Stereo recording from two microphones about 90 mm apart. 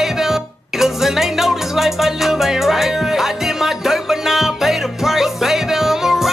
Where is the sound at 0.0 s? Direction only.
5° right (ahead or behind).